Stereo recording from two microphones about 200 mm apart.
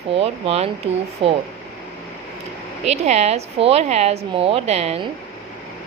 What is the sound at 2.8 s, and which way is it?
Speech, 35° right (ahead or behind).